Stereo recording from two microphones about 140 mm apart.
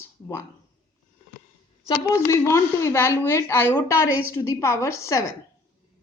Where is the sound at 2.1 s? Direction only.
20° left (ahead or behind).